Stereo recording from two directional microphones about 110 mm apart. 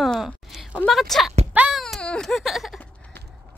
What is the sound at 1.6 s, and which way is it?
Baby cry, 5° right (ahead or behind).